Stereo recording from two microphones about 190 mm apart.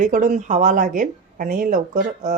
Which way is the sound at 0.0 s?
45° right (ahead or behind).